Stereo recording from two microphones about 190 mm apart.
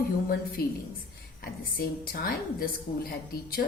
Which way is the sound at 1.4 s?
50° left (ahead or behind).